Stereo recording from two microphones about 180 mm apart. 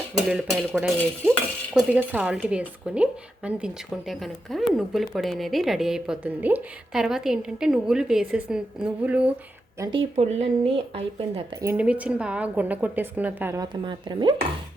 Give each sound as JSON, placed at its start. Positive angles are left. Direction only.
{"t": 0.1, "sound": "speech", "side_deg": 0}
{"t": 9.8, "sound": "speech", "side_deg": -20}
{"t": 10.2, "sound": "a woman's voice", "side_deg": -35}
{"t": 11.6, "sound": "speech", "side_deg": -10}
{"t": 13.8, "sound": "speech", "side_deg": -25}